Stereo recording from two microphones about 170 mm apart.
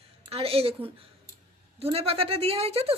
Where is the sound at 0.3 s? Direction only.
35° right (ahead or behind).